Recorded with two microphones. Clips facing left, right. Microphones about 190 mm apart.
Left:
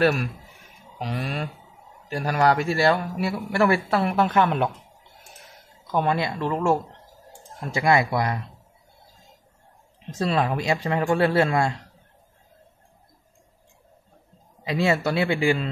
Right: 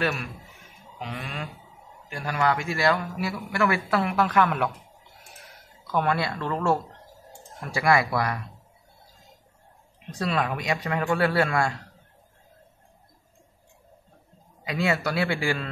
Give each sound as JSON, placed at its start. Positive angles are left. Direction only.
{"t": 0.9, "sound": "speech", "side_deg": 35}
{"t": 5.9, "sound": "a man's voice", "side_deg": 20}
{"t": 10.1, "sound": "a man's voice", "side_deg": 30}
{"t": 14.6, "sound": "a man's voice", "side_deg": 25}